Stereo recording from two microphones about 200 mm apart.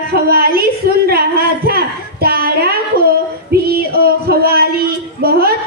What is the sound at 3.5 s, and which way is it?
Music, 50° right (ahead or behind).